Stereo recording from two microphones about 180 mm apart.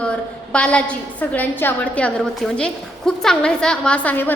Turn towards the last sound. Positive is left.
turn(degrees=10)  # may be behind; listen again after turning